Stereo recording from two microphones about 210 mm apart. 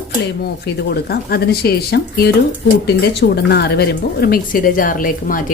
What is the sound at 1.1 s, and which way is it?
Speech, 50° left (ahead or behind).